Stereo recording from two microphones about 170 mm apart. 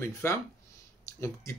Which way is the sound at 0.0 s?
15° left (ahead or behind).